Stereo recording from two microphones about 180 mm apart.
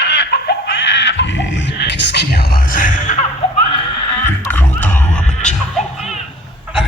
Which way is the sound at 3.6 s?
30° left (ahead or behind).